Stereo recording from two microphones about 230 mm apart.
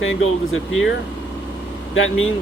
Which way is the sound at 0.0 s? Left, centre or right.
Left.